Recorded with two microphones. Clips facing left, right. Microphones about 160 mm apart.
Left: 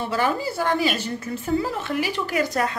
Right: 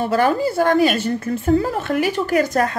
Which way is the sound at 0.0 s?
55° right (ahead or behind).